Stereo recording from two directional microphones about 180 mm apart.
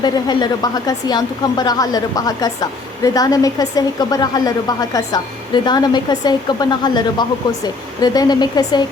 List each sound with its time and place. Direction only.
0.0 s speech: 20° left (ahead or behind)